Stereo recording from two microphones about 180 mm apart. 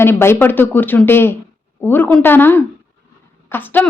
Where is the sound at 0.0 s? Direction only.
15° left (ahead or behind).